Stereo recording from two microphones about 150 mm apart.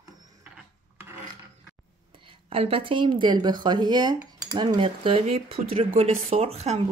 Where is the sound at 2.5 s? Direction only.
40° right (ahead or behind).